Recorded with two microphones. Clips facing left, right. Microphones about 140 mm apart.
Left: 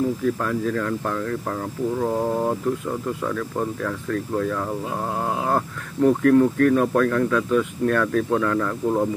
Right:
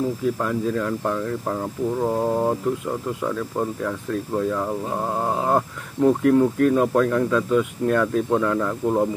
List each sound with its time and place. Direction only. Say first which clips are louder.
0.2 s speech: even; 20° right (ahead or behind)
6.0 s speech: left 1 dB; 15° right (ahead or behind)